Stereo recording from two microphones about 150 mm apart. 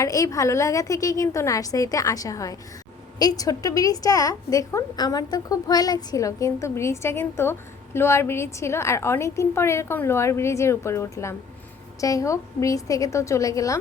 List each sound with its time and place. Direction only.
0.0 s a woman's voice: 20° left (ahead or behind)